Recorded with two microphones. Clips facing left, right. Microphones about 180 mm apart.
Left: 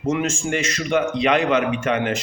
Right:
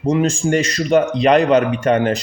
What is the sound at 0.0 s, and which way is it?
A man's voice, 35° right (ahead or behind).